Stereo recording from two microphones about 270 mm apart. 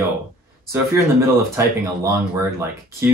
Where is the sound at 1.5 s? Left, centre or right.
Centre.